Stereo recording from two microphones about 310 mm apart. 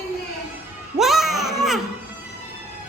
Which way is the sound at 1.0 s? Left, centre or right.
Centre.